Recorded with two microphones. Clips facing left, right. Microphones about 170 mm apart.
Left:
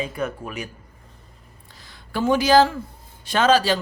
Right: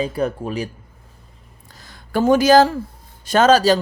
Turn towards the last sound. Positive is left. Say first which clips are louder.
# right 5 dB
turn(degrees=-40)  # may be behind; listen again after turning